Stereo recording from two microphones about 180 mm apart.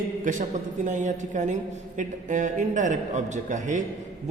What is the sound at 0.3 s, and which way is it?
A man's voice, 45° right (ahead or behind).